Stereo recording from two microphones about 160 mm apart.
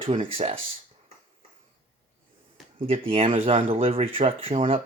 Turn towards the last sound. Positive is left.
turn(degrees=-40)  # may be behind; listen again after turning